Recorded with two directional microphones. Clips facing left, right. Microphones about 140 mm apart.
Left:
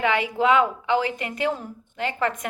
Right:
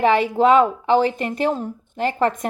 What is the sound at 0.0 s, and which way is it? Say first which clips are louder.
A woman's voice: right 6 dB; 35° right (ahead or behind).